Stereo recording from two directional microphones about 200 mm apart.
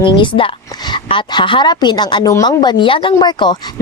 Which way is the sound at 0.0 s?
25° left (ahead or behind).